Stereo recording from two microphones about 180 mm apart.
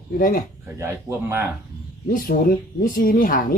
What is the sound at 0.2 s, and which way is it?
Speech, 50° left (ahead or behind).